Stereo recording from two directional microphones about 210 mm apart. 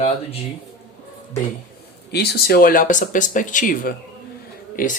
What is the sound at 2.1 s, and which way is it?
Speech, 50° left (ahead or behind).